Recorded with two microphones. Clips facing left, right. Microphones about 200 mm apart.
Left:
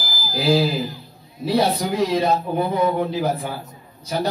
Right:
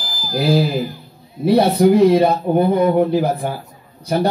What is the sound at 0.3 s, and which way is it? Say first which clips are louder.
A man's voice: right 2 dB; 55° right (ahead or behind).